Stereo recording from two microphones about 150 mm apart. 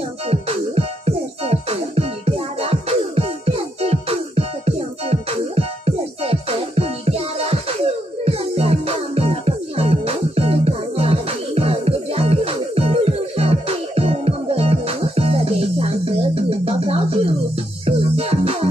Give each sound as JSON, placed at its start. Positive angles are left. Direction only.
{"t": 0.3, "sound": "music", "side_deg": -40}